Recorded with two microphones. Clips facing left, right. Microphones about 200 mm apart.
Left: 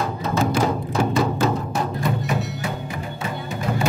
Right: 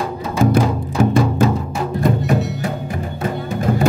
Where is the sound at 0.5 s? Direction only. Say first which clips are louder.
Right 3 dB; 50° right (ahead or behind).